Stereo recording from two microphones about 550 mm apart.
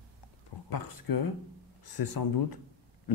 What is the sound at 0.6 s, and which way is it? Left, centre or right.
Speech, left.